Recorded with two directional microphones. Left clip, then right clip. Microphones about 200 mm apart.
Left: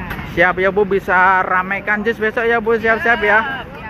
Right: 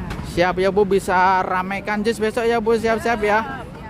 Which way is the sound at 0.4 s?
20° right (ahead or behind).